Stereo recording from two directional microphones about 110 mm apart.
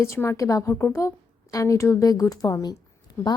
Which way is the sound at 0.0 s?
25° left (ahead or behind).